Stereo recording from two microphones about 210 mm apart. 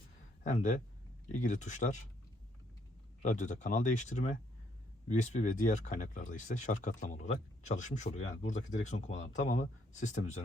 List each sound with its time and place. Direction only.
0.4 s speech: 35° left (ahead or behind)
3.2 s speech: 35° left (ahead or behind)